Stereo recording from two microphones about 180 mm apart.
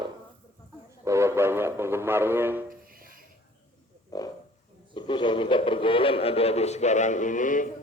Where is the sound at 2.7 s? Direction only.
55° right (ahead or behind).